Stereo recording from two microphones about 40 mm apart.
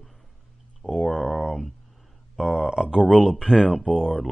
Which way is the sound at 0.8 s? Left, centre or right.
Right.